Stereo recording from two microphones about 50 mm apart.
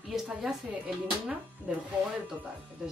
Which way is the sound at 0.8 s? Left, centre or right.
Right.